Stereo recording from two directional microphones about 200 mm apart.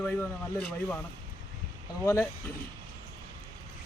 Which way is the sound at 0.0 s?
5° left (ahead or behind).